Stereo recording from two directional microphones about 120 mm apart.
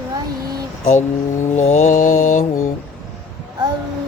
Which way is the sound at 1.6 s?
80° left.